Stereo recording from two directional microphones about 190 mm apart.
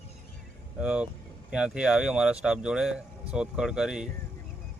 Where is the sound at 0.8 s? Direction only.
5° right (ahead or behind).